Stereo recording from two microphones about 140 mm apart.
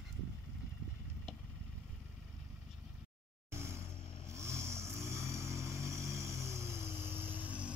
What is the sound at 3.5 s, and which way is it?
Vehicle, 20° right (ahead or behind).